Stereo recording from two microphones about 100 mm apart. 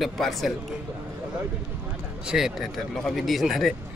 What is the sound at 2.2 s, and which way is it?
Speech, 5° right (ahead or behind).